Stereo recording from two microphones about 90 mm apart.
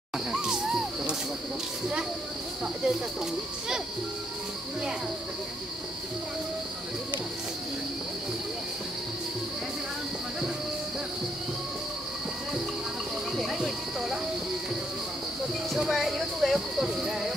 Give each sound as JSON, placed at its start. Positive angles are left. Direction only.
{"t": 0.3, "sound": "music", "side_deg": -5}
{"t": 13.4, "sound": "cricket", "side_deg": -5}
{"t": 15.7, "sound": "a sound", "side_deg": 0}